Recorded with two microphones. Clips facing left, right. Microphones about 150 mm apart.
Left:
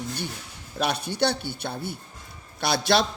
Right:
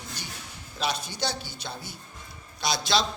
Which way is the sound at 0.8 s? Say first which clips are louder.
Left 5 dB; 60° left (ahead or behind).